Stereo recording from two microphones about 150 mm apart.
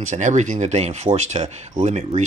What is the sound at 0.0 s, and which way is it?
Speech, 55° right (ahead or behind).